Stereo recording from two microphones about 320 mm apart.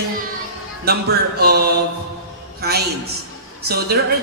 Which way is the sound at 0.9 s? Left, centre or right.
Right.